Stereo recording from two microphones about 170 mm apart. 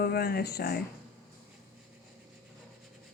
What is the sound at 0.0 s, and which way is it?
Speech, 65° left (ahead or behind).